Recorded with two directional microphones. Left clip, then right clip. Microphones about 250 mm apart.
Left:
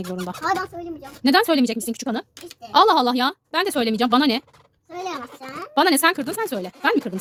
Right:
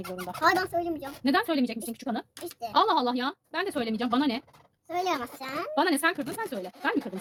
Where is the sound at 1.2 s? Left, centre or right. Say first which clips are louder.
Left 9 dB; left.